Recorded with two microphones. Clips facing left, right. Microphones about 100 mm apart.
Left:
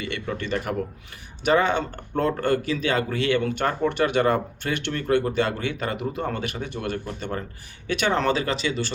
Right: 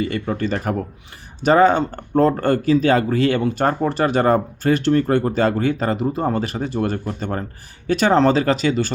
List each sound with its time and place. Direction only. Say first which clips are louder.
0.0 s speech: right 8 dB; 35° right (ahead or behind)